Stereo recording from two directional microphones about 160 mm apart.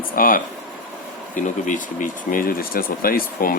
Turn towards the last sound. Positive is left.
turn(degrees=65)  # may be behind; listen again after turning